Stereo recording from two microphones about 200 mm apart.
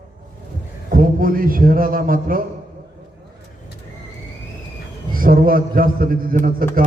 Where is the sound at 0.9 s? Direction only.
45° right (ahead or behind).